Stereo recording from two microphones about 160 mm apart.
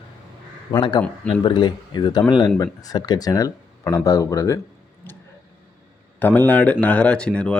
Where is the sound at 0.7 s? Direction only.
25° left (ahead or behind).